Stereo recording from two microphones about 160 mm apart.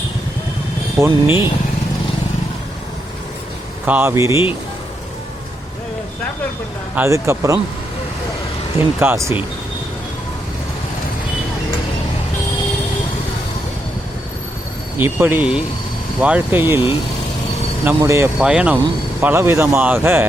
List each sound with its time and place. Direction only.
0.9 s speech: 15° right (ahead or behind)
3.8 s speech: 10° right (ahead or behind)
6.9 s speech: 15° right (ahead or behind)
9.0 s speech: 15° right (ahead or behind)
14.9 s speech: 15° right (ahead or behind)
17.8 s speech: 15° right (ahead or behind)
18.3 s speech: 5° right (ahead or behind)